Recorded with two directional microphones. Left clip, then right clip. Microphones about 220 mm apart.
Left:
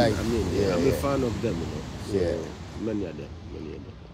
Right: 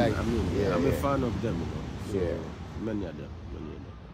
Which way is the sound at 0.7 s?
Centre (ahead or behind).